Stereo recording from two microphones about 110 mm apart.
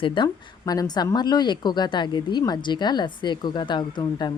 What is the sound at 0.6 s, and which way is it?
A woman's voice, 35° left (ahead or behind).